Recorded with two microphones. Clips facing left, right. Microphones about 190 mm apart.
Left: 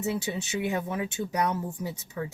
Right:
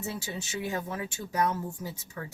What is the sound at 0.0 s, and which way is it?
Speech, 20° left (ahead or behind).